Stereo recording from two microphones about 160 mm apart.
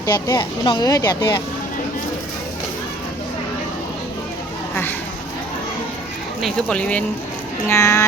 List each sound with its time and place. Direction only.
0.0 s speech: 25° left (ahead or behind)
4.7 s a sound: 10° left (ahead or behind)
6.4 s speech: 5° left (ahead or behind)
7.7 s speech: 15° left (ahead or behind)